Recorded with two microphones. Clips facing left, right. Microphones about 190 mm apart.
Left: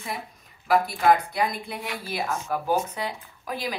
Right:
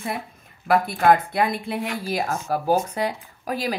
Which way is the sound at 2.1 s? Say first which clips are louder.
Right 2 dB; 45° right (ahead or behind).